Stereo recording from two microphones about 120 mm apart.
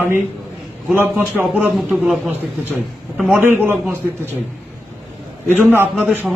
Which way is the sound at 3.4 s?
15° right (ahead or behind).